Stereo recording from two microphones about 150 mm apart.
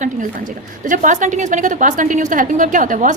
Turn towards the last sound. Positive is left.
turn(degrees=-60)  # may be behind; listen again after turning